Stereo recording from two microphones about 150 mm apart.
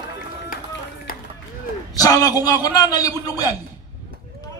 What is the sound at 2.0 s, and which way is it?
A man's voice, 25° left (ahead or behind).